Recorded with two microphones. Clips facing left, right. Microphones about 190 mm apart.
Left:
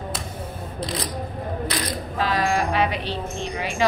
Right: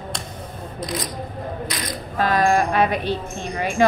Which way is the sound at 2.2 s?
50° right (ahead or behind).